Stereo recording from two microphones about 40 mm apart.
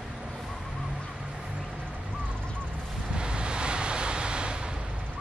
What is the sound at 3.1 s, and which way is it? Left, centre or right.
Vehicle, right.